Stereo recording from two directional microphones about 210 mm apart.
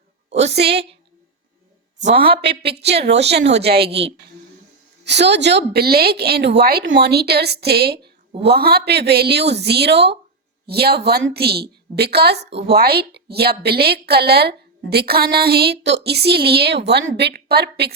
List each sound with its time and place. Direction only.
0.5 s a woman's voice: 50° right (ahead or behind)
2.1 s a woman's voice: 25° right (ahead or behind)
2.4 s a woman's voice: 50° right (ahead or behind)
5.0 s a woman's voice: 55° right (ahead or behind)